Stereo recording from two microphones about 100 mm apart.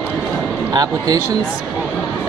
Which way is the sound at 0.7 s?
40° right (ahead or behind).